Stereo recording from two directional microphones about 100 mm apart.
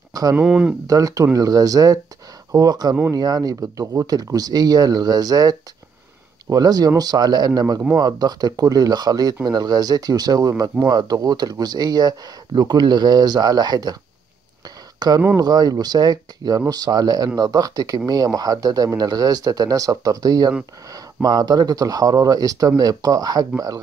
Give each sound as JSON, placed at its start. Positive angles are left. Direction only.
{"t": 0.1, "sound": "a sound", "side_deg": -40}
{"t": 0.4, "sound": "speech", "side_deg": -10}
{"t": 0.8, "sound": "speech", "side_deg": -35}
{"t": 15.0, "sound": "speech", "side_deg": -45}